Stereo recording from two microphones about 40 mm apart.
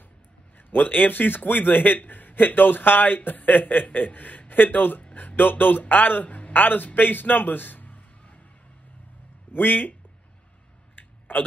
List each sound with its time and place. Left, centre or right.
0.6 s a man's voice: left
6.2 s a man's voice: left
9.5 s speech: left
11.0 s clicking: left